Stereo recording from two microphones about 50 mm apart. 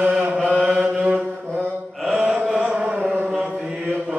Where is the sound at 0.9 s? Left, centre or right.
Right.